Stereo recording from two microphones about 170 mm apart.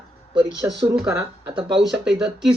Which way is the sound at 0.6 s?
15° right (ahead or behind).